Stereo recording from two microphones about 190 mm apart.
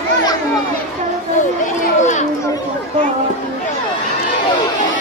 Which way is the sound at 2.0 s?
40° left (ahead or behind).